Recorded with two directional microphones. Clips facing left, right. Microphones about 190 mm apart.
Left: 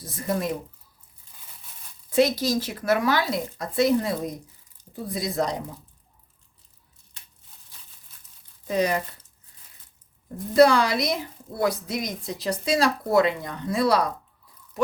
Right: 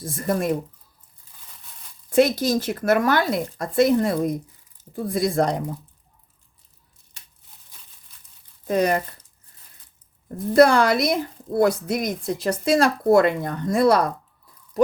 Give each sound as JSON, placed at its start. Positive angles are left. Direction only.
{"t": 0.0, "sound": "a woman's voice", "side_deg": -50}
{"t": 2.0, "sound": "a woman's voice", "side_deg": -50}
{"t": 8.6, "sound": "speech", "side_deg": -50}
{"t": 10.5, "sound": "a woman's voice", "side_deg": -50}